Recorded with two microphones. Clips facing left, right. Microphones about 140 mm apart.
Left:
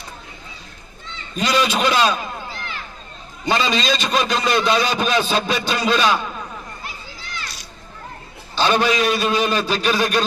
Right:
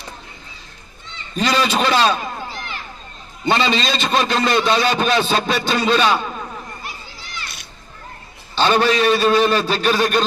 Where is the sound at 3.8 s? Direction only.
5° left (ahead or behind).